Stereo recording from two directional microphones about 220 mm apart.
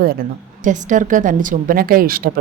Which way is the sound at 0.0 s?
40° right (ahead or behind).